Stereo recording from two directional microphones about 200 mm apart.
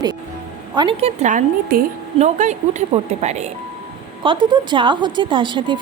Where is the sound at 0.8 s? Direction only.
30° right (ahead or behind).